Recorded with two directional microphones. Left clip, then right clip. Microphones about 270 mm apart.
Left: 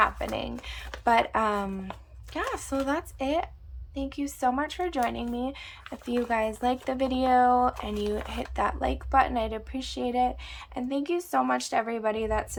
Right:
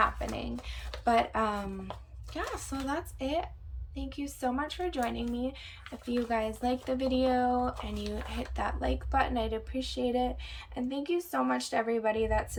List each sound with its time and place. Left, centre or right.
0.0 s speech: centre